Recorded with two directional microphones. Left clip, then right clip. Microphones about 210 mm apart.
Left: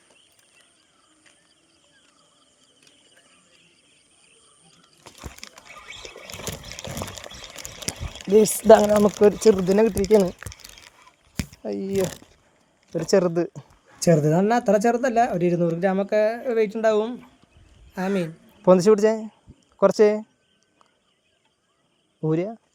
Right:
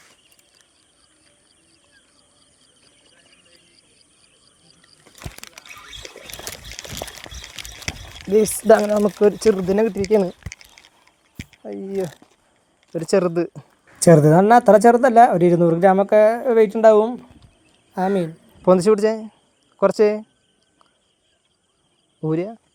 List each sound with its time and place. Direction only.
8.6 s speech: centre (ahead or behind)
9.5 s speech: 5° left (ahead or behind)
12.9 s speech: centre (ahead or behind)
14.0 s speech: 20° right (ahead or behind)
18.6 s speech: centre (ahead or behind)
22.2 s speech: centre (ahead or behind)